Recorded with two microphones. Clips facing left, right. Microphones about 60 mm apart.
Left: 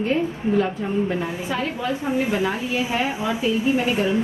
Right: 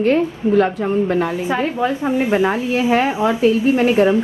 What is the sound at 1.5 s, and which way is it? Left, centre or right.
A woman's voice, right.